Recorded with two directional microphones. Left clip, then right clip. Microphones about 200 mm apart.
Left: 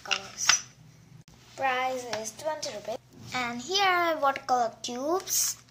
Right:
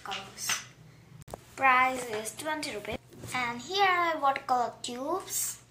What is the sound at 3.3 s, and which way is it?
A child's voice, 40° left (ahead or behind).